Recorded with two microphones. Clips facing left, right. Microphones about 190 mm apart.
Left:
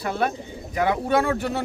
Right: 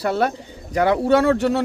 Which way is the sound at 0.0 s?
75° right (ahead or behind).